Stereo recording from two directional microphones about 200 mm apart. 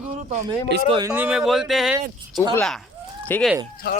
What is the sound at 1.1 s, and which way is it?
Speech, 5° right (ahead or behind).